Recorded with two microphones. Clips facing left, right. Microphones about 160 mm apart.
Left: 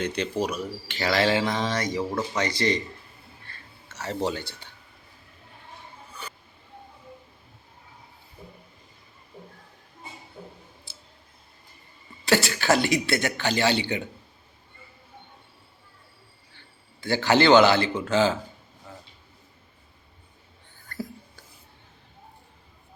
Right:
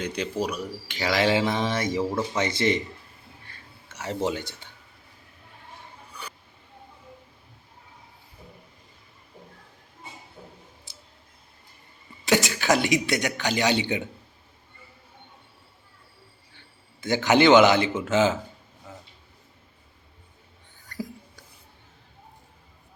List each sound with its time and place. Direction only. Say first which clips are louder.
0.0 s speech: left 1 dB; 10° right (ahead or behind)
2.4 s speech: right 1 dB; 20° right (ahead or behind)
3.4 s a sound: left 1 dB; 15° right (ahead or behind)
4.3 s speech: right 1 dB; 20° right (ahead or behind)
10.9 s a sound: even; 15° right (ahead or behind)
12.2 s speech: even; 15° right (ahead or behind)
17.0 s speech: right 1 dB; 20° right (ahead or behind)